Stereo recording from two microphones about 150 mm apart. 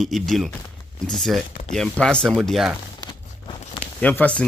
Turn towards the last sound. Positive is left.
turn(degrees=10)  # may be behind; listen again after turning